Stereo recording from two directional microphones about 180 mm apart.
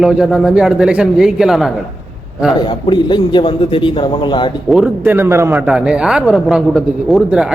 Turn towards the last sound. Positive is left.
turn(degrees=-5)  # may be behind; listen again after turning